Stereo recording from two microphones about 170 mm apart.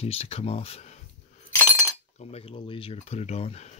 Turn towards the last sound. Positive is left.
turn(degrees=40)  # may be behind; listen again after turning